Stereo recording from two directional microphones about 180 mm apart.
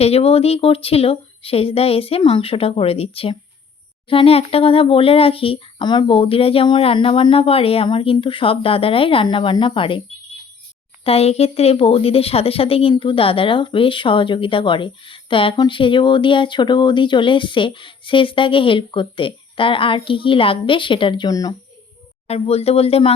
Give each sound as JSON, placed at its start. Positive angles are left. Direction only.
{"t": 0.0, "sound": "speech", "side_deg": 35}
{"t": 11.0, "sound": "speech", "side_deg": 35}
{"t": 22.3, "sound": "speech", "side_deg": 35}